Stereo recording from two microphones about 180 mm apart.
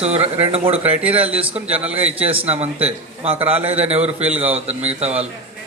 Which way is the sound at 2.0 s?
35° right (ahead or behind).